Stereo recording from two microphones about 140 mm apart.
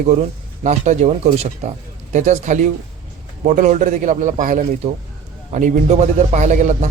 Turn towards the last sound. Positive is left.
turn(degrees=-55)  # may be behind; listen again after turning